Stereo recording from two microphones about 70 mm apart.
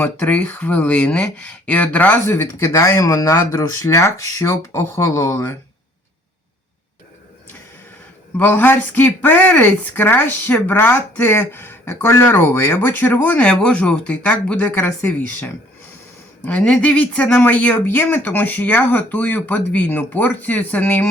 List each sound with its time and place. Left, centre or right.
0.0 s speech: left
2.2 s speech: left
3.0 s speech: left
8.4 s speech: left
13.4 s speech: centre
16.5 s speech: centre